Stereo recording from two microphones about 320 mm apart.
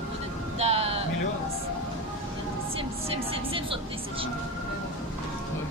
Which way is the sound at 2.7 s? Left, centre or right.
Centre.